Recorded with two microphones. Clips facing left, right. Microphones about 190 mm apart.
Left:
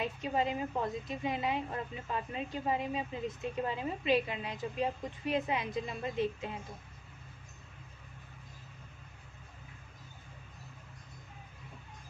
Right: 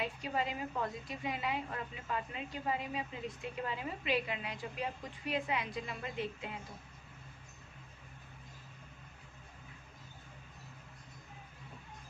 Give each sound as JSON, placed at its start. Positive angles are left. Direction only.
{"t": 0.0, "sound": "a woman's voice", "side_deg": 20}